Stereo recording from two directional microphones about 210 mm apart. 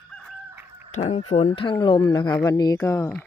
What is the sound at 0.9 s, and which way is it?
Speech, 30° left (ahead or behind).